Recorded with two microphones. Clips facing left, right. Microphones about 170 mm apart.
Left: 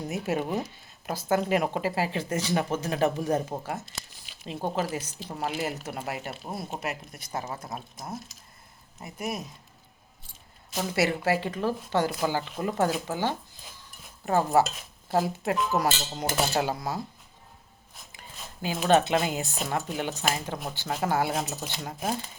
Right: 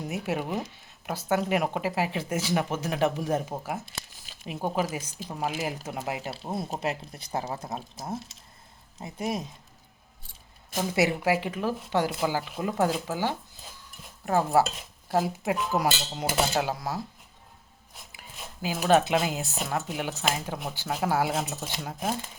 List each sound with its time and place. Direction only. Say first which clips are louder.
0.0 s speech: left 1 dB; 5° right (ahead or behind)
6.3 s speech: right 3 dB; 25° right (ahead or behind)
10.8 s speech: right 1 dB; 15° right (ahead or behind)
18.1 s speech: right 1 dB; 5° right (ahead or behind)